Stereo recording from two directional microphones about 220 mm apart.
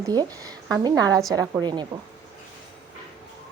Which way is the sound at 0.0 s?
15° right (ahead or behind).